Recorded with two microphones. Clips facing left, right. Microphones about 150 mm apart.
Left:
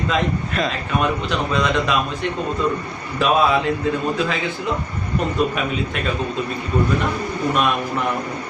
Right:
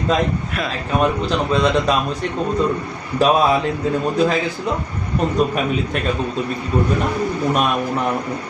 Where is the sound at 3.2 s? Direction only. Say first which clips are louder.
Right 3 dB; 40° right (ahead or behind).